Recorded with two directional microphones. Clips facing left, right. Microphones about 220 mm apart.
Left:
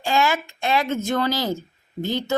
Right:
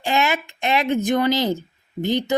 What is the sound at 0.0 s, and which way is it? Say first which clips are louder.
Speech: even; 20° right (ahead or behind).